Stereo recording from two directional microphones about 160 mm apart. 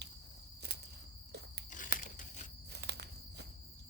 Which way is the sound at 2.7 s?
90° right.